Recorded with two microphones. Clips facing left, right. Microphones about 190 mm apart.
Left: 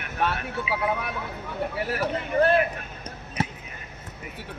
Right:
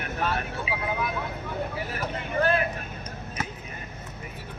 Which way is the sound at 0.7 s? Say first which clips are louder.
Left 5 dB; 35° right (ahead or behind).